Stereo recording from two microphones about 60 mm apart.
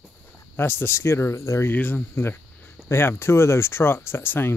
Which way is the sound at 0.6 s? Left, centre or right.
Left.